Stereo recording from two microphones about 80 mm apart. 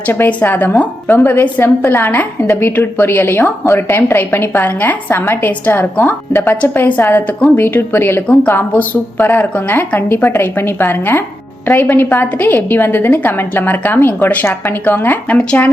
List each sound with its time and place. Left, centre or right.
0.3 s a woman's voice: left